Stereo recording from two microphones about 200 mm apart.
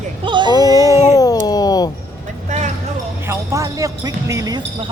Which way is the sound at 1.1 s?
20° left (ahead or behind).